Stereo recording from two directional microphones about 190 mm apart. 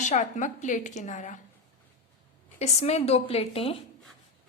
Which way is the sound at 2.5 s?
35° left (ahead or behind).